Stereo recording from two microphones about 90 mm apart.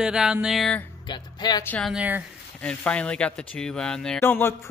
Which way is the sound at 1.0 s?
55° left (ahead or behind).